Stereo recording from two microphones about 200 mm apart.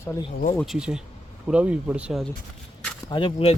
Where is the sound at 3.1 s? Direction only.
25° left (ahead or behind).